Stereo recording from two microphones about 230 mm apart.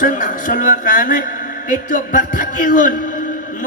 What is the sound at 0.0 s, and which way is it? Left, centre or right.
A man's voice, left.